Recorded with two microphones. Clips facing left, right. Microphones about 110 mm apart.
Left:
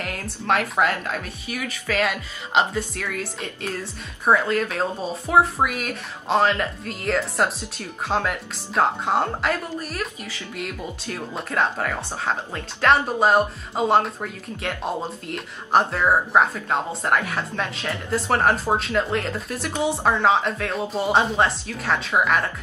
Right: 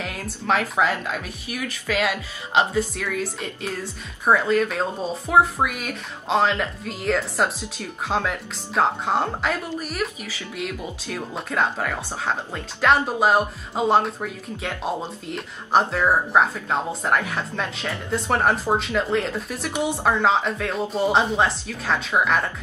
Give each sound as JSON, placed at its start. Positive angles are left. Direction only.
{"t": 0.0, "sound": "speech", "side_deg": 0}
{"t": 9.8, "sound": "speech", "side_deg": -15}
{"t": 11.3, "sound": "speech", "side_deg": 0}